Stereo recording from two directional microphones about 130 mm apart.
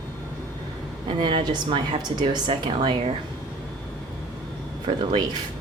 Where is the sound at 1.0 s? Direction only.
40° right (ahead or behind).